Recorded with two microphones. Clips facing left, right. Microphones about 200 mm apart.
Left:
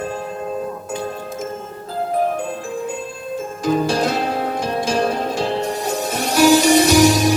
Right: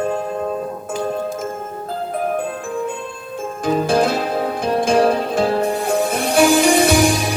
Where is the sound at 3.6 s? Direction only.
55° right (ahead or behind).